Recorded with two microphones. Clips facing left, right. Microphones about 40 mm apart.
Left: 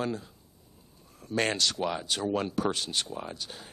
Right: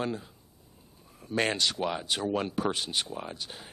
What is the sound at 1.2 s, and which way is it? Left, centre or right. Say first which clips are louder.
Speech: even; centre.